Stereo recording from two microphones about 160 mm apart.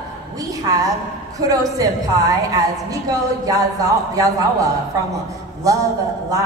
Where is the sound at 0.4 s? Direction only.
20° right (ahead or behind).